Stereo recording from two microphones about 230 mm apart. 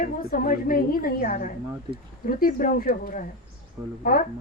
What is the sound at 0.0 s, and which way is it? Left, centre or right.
A woman's voice, left.